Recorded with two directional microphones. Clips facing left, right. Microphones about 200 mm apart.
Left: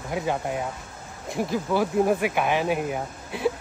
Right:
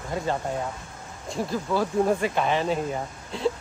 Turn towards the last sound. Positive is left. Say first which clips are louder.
# left 1 dB
turn(degrees=10)  # may be behind; listen again after turning